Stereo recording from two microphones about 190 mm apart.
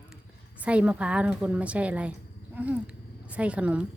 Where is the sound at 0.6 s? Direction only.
5° right (ahead or behind).